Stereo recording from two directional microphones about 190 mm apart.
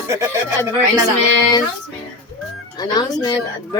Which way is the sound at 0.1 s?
15° right (ahead or behind).